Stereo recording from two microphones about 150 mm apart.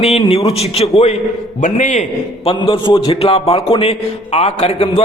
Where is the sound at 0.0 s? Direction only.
40° left (ahead or behind).